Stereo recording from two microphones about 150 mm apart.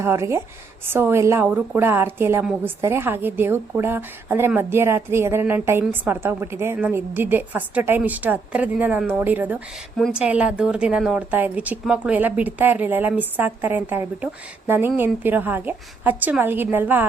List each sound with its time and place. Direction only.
0.0 s a woman's voice: 20° right (ahead or behind)